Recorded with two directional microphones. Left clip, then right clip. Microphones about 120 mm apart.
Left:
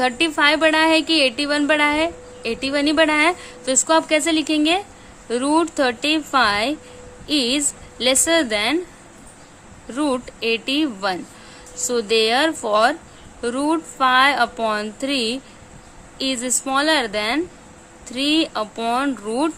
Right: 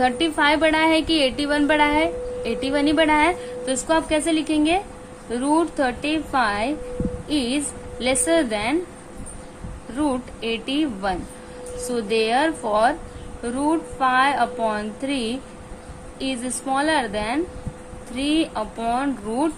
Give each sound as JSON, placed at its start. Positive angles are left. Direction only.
{"t": 0.0, "sound": "a woman's voice", "side_deg": 55}
{"t": 10.0, "sound": "a woman's voice", "side_deg": 85}